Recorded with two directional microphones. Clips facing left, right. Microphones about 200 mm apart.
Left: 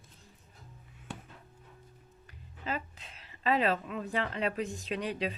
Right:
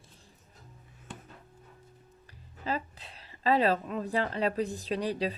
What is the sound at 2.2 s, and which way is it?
Speech, 35° right (ahead or behind).